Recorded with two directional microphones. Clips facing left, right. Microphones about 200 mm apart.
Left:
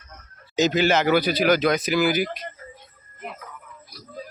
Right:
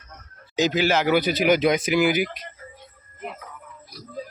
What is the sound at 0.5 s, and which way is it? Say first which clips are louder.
Speech: left 1 dB; 10° right (ahead or behind).